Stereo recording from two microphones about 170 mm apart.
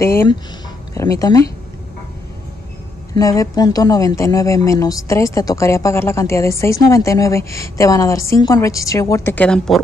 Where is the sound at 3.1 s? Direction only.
20° left (ahead or behind).